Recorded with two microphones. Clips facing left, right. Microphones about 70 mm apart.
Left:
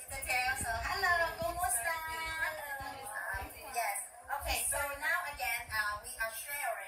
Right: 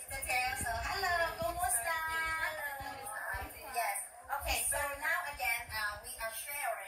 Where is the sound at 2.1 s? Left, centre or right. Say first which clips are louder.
Right 4 dB; right.